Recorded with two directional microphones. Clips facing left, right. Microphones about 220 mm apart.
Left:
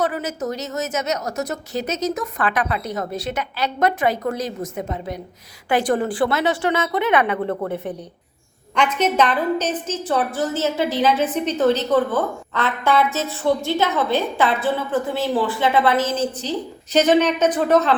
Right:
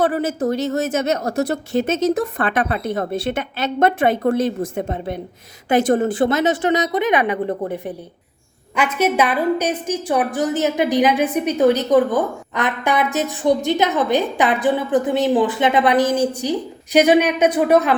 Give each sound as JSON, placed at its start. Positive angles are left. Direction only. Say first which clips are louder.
{"t": 0.0, "sound": "a woman's voice", "louder": "right 5 dB", "side_deg": -30}
{"t": 1.7, "sound": "speech", "louder": "right 6 dB", "side_deg": -50}
{"t": 2.1, "sound": "a woman's voice", "louder": "right 3 dB", "side_deg": -30}
{"t": 8.7, "sound": "a woman's voice", "louder": "right 1 dB", "side_deg": -5}